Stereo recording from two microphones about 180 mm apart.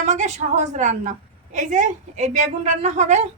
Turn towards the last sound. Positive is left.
turn(degrees=-40)  # may be behind; listen again after turning